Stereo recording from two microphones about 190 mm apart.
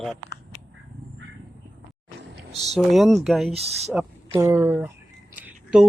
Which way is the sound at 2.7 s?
Centre (ahead or behind).